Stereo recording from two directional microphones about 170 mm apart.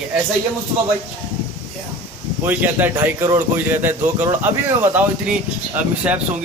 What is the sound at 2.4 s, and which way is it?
Speech, 10° right (ahead or behind).